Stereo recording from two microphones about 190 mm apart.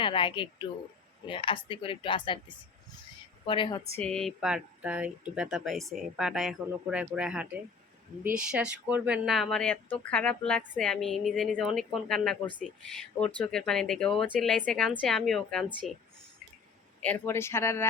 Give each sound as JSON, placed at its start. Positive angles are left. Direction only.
{"t": 0.0, "sound": "speech", "side_deg": 25}
{"t": 3.4, "sound": "speech", "side_deg": 25}
{"t": 4.0, "sound": "a woman's voice", "side_deg": 5}
{"t": 17.0, "sound": "speech", "side_deg": 10}